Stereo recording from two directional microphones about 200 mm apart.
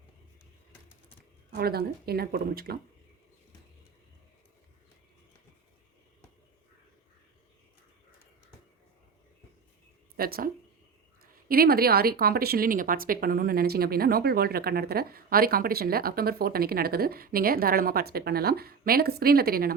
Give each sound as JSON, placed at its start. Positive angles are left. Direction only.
{"t": 1.5, "sound": "a woman's voice", "side_deg": -50}
{"t": 10.2, "sound": "a woman's voice", "side_deg": -50}